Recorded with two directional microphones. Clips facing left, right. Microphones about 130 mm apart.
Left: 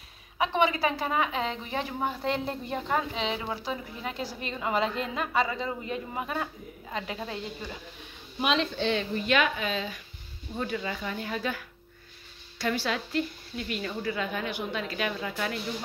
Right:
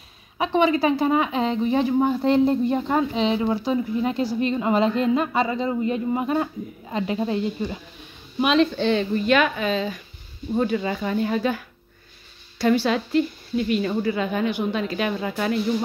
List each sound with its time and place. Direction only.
0.4 s a woman's voice: 30° right (ahead or behind)
8.4 s a woman's voice: 55° right (ahead or behind); by 15.6 s 30° right (ahead or behind)